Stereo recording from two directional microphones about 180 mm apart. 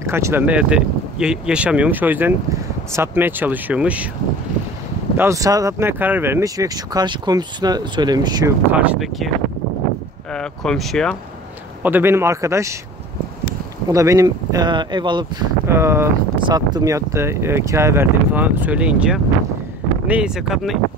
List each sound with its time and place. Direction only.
0.0 s speech: 15° right (ahead or behind)
5.1 s speech: 15° right (ahead or behind)
8.7 s speech: 5° right (ahead or behind)
10.3 s speech: 5° left (ahead or behind)
11.8 s speech: 10° right (ahead or behind)
13.8 s speech: 20° right (ahead or behind)
15.6 s speech: 15° right (ahead or behind)